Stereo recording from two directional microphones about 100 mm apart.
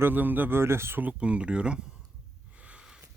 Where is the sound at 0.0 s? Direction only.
20° right (ahead or behind).